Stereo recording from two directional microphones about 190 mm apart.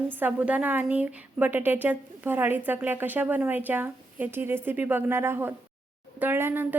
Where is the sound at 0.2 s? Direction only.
10° right (ahead or behind).